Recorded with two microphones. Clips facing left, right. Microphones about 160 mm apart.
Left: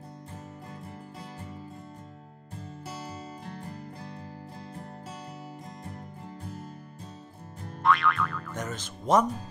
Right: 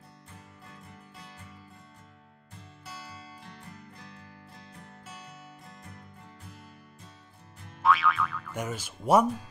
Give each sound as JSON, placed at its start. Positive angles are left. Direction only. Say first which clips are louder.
{"t": 3.5, "sound": "music", "louder": "left 8 dB", "side_deg": 35}
{"t": 7.8, "sound": "speech", "louder": "even", "side_deg": 0}